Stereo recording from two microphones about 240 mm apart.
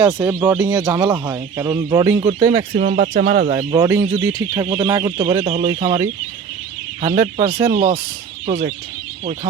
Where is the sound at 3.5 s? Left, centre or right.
Centre; by 5.9 s right.